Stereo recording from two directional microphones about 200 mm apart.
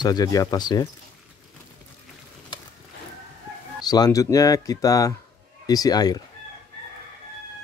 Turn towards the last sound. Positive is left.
turn(degrees=20)  # may be behind; listen again after turning